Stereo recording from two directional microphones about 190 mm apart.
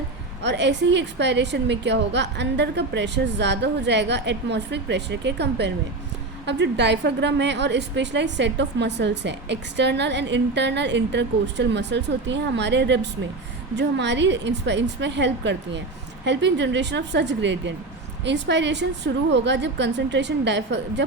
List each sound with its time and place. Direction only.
0.4 s a woman's voice: 65° right (ahead or behind)